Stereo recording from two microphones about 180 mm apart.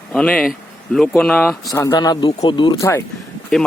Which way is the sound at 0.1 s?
5° left (ahead or behind).